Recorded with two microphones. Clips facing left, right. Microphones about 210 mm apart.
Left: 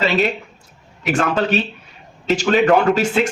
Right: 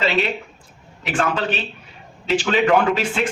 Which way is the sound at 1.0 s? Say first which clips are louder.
Left 3 dB; 40° left (ahead or behind).